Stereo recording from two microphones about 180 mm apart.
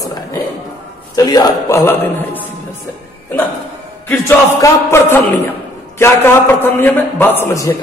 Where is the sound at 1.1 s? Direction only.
20° left (ahead or behind).